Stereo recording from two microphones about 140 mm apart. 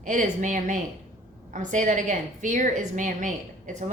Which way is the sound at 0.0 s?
65° right (ahead or behind).